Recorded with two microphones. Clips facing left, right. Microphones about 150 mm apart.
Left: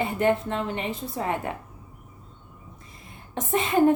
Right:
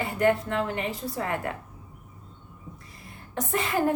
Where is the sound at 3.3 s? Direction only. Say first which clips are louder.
Left 3 dB; 20° left (ahead or behind).